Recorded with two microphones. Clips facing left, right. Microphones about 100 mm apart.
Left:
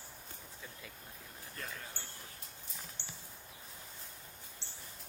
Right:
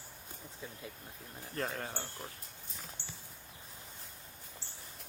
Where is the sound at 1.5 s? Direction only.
50° right (ahead or behind).